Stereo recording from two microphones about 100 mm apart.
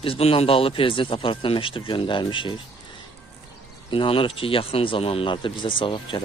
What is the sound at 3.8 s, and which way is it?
Speech, 60° left (ahead or behind).